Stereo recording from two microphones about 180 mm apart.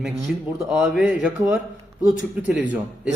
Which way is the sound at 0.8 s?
Centre (ahead or behind).